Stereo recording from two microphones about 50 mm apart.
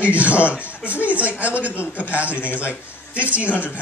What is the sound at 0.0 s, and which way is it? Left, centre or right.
Speech, right.